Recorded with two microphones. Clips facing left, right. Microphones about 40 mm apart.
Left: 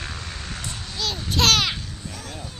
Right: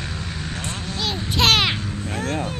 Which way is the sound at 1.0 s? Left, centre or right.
Right.